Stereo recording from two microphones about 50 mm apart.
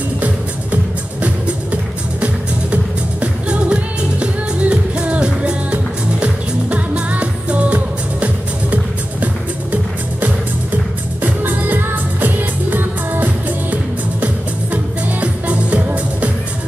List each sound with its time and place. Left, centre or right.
1.2 s music: right
11.4 s music: right
14.2 s music: right